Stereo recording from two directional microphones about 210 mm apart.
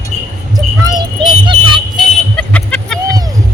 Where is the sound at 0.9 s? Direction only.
20° right (ahead or behind).